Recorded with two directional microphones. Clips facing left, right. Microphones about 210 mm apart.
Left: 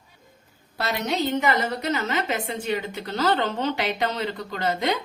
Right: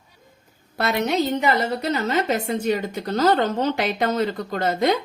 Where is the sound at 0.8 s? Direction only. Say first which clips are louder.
Right 5 dB; 55° right (ahead or behind).